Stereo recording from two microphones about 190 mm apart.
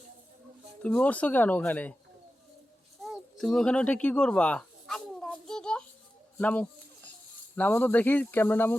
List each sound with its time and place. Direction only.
0.8 s speech: 5° left (ahead or behind)
3.0 s a sound: centre (ahead or behind)
7.5 s speech: 10° left (ahead or behind)